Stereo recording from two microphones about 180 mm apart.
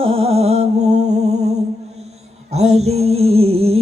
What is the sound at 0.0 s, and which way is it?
Music, 30° right (ahead or behind).